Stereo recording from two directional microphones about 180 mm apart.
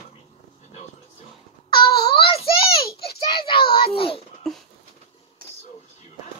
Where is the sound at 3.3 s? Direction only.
25° left (ahead or behind).